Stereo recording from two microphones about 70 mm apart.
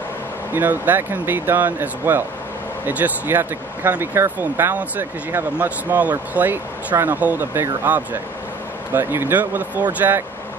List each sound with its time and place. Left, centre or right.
0.6 s speech: right